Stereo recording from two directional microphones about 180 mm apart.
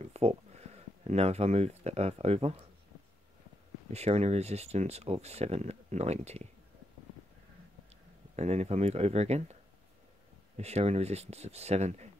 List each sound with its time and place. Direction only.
0.0 s speech: 35° right (ahead or behind)
3.9 s speech: 35° right (ahead or behind)
8.4 s speech: 35° right (ahead or behind)
10.6 s speech: 35° right (ahead or behind)